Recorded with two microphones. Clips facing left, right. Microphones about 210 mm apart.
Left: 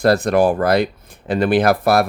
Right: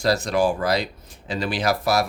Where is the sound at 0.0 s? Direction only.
55° left (ahead or behind).